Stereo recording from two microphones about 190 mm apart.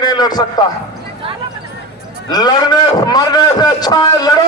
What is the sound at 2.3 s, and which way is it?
A man's voice, 20° left (ahead or behind).